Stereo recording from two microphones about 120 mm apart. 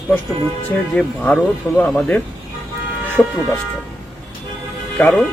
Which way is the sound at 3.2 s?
Centre (ahead or behind).